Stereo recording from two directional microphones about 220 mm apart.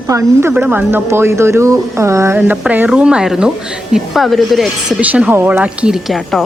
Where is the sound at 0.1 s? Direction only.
10° right (ahead or behind).